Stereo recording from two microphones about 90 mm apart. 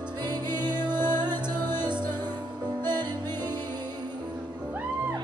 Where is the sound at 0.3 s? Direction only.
50° right (ahead or behind).